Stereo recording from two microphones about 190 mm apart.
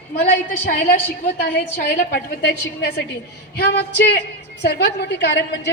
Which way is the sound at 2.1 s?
55° left (ahead or behind).